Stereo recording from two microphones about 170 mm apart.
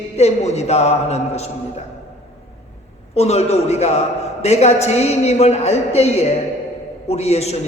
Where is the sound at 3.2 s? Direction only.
40° left (ahead or behind).